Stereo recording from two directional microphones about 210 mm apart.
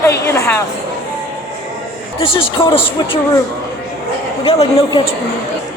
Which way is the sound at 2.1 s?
25° left (ahead or behind).